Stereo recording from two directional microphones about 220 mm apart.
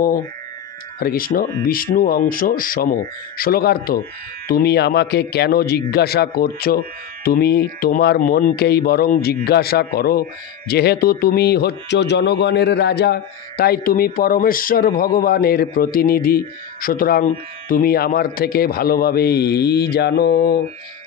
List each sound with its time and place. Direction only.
0.9 s a man's voice: 40° left (ahead or behind)